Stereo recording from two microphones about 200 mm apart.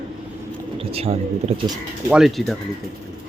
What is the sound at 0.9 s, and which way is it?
Speech, 30° right (ahead or behind).